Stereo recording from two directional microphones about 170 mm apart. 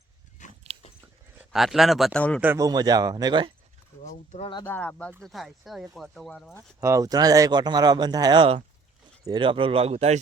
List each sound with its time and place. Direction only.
0.4 s dog: 45° left (ahead or behind)
1.4 s speech: centre (ahead or behind)
2.4 s speech: 10° right (ahead or behind)
2.6 s speech: 25° right (ahead or behind)
4.0 s speech: 40° left (ahead or behind)
4.6 s speech: 10° left (ahead or behind)
6.7 s speech: 20° right (ahead or behind); by 10.2 s 40° right (ahead or behind)